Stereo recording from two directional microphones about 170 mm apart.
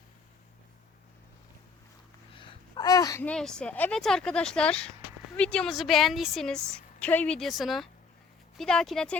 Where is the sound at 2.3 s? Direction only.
30° left (ahead or behind).